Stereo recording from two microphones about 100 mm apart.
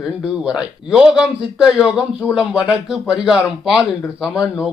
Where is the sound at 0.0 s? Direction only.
5° right (ahead or behind).